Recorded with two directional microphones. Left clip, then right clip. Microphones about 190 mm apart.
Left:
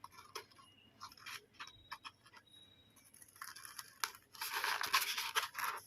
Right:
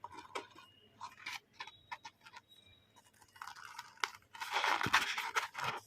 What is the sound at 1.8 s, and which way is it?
Clock, 15° right (ahead or behind).